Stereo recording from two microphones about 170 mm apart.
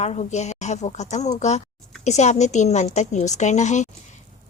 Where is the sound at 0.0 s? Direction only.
40° left (ahead or behind).